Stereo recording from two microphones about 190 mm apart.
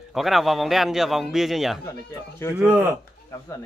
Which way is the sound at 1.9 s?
15° left (ahead or behind).